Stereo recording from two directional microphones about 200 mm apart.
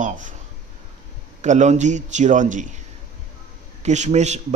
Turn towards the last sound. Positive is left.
turn(degrees=-35)  # may be behind; listen again after turning